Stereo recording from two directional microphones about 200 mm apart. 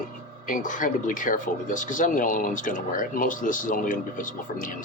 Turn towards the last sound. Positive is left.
turn(degrees=40)  # may be behind; listen again after turning